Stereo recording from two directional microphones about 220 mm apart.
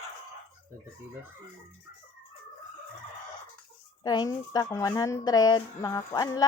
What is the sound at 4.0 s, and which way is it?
A woman's voice, 20° left (ahead or behind).